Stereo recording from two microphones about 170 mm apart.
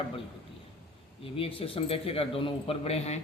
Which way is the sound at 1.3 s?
35° left (ahead or behind).